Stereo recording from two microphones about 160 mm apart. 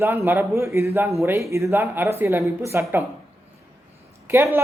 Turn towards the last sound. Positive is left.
turn(degrees=-15)  # may be behind; listen again after turning